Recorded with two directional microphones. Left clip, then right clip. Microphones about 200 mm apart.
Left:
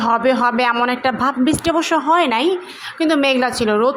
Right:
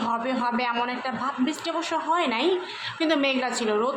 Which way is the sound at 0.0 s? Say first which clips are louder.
Left 11 dB; 30° left (ahead or behind).